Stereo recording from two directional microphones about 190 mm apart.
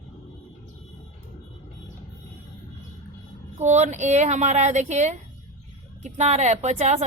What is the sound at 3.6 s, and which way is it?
Speech, 40° right (ahead or behind).